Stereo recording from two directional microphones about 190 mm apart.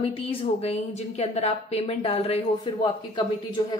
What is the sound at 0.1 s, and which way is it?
A woman's voice, 30° left (ahead or behind).